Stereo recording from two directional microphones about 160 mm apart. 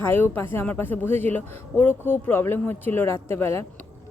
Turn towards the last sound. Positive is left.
turn(degrees=15)  # may be behind; listen again after turning